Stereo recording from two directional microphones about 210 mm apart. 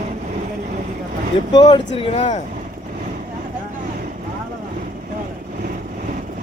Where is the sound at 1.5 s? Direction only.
20° left (ahead or behind).